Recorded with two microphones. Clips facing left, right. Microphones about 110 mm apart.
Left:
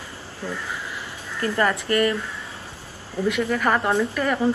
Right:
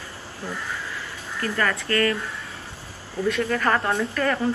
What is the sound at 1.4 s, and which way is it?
Speech, 20° left (ahead or behind).